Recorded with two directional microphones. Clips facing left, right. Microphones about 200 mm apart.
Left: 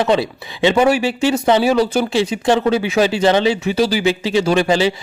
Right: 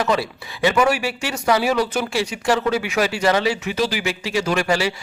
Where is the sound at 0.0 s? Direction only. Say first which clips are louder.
Left 5 dB; 25° left (ahead or behind).